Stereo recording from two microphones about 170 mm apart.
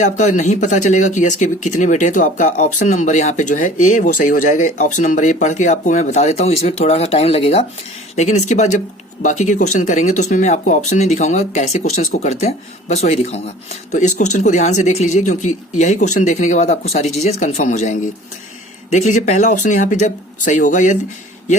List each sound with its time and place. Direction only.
0.0 s speech: 45° left (ahead or behind)